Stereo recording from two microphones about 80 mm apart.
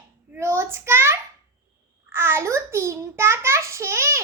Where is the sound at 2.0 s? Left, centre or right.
Right.